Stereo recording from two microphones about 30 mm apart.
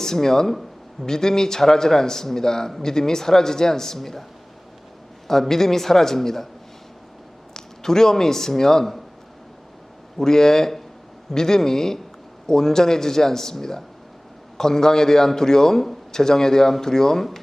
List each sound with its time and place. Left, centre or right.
0.0 s a man's voice: centre
5.3 s a man's voice: centre
7.5 s speech: centre
10.2 s a man's voice: centre